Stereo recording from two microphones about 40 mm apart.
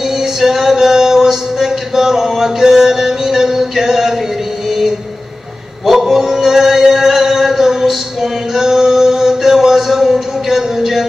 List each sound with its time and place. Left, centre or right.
0.2 s music: centre
5.9 s male singing: centre